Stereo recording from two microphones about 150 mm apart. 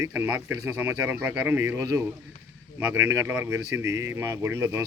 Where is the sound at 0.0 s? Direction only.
15° right (ahead or behind).